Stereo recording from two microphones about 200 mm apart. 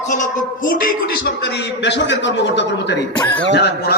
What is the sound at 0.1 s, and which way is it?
A man's voice, 40° left (ahead or behind).